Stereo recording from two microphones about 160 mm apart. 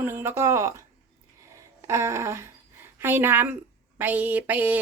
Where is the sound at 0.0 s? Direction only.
15° right (ahead or behind).